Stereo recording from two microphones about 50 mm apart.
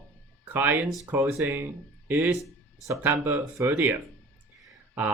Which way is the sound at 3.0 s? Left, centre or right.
Right.